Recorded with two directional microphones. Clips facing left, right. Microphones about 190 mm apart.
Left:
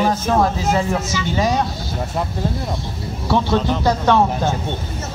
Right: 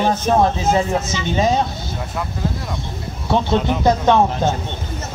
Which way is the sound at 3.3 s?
20° right (ahead or behind).